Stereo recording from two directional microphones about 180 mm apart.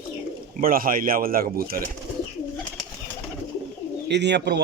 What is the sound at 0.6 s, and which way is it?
Speech, 55° right (ahead or behind).